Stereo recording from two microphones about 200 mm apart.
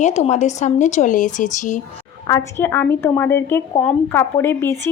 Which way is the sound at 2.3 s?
10° left (ahead or behind).